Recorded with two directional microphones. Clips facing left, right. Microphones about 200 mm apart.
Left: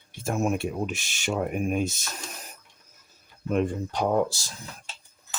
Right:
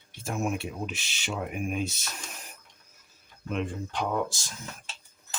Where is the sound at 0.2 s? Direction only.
40° left (ahead or behind).